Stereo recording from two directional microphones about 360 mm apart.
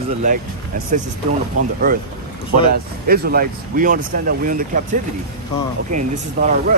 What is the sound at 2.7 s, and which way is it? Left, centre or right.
Speech, right.